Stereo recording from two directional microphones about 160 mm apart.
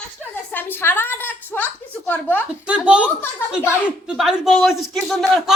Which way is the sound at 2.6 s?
5° right (ahead or behind).